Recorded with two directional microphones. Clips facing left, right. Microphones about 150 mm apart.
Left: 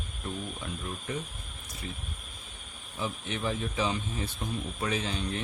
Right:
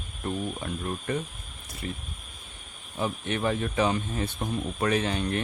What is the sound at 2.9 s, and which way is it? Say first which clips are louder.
Speech: right 5 dB; 55° right (ahead or behind).